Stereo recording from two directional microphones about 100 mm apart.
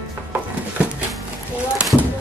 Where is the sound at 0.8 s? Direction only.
10° right (ahead or behind).